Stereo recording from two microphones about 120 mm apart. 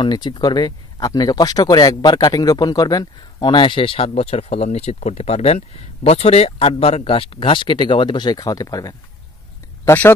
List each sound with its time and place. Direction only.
0.0 s speech: 40° left (ahead or behind); by 10.1 s 20° left (ahead or behind)